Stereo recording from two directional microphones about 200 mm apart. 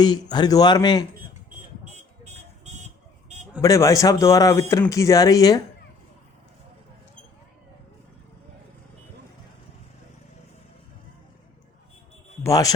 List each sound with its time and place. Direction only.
0.0 s a man's voice: 20° left (ahead or behind)
3.6 s speech: 15° left (ahead or behind)
12.4 s a man's voice: 15° left (ahead or behind)